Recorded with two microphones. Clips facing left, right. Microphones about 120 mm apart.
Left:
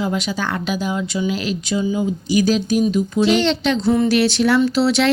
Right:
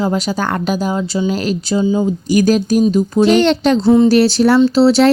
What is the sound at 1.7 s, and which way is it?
Speech, 30° right (ahead or behind).